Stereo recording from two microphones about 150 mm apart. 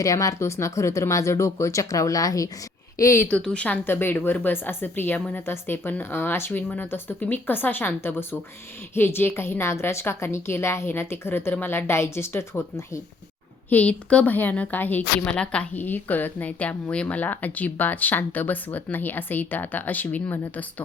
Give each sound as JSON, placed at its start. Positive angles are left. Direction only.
{"t": 0.0, "sound": "speech", "side_deg": 20}
{"t": 3.2, "sound": "a woman's voice", "side_deg": 5}
{"t": 13.7, "sound": "a woman's voice", "side_deg": 10}